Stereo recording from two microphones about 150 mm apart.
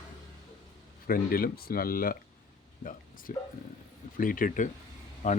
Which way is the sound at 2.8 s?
65° left (ahead or behind).